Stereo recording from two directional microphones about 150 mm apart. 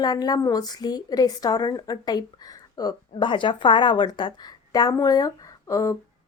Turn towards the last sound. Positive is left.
turn(degrees=20)  # may be behind; listen again after turning